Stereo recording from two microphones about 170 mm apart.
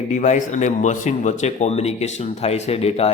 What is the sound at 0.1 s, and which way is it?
Speech, 45° left (ahead or behind).